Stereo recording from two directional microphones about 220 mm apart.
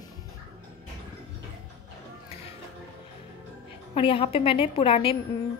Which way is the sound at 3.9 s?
25° left (ahead or behind).